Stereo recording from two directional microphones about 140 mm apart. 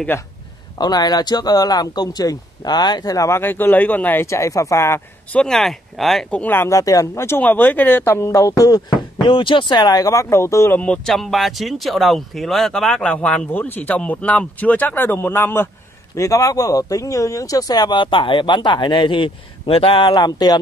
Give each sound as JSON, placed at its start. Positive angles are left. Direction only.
{"t": 0.7, "sound": "speech", "side_deg": 30}
{"t": 5.4, "sound": "speech", "side_deg": 5}